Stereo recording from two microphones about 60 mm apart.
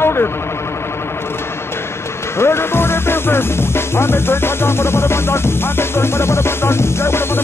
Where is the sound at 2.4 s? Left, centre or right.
Left.